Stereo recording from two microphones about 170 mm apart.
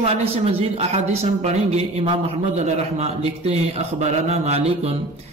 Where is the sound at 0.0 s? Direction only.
35° right (ahead or behind).